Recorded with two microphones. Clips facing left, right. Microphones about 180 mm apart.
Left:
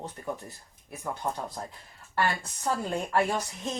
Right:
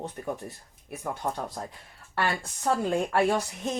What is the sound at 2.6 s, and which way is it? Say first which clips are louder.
Speech: right 4 dB; 65° right (ahead or behind).